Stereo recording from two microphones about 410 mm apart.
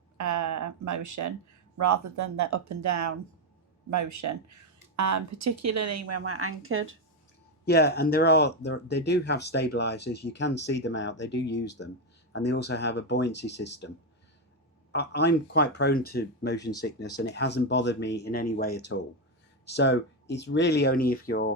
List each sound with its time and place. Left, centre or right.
0.2 s a sound: right
1.8 s a woman's voice: right
7.6 s speech: left
14.9 s speech: left